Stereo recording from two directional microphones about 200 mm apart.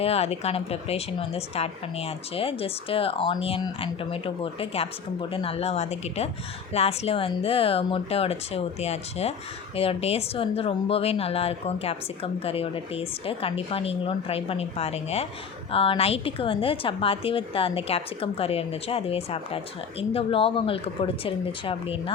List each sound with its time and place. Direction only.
0.0 s a woman's voice: 30° left (ahead or behind)